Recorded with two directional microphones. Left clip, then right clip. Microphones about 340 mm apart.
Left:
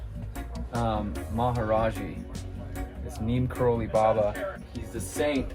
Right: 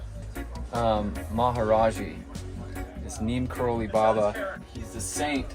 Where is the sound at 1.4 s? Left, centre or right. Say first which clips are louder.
Right 4 dB; right.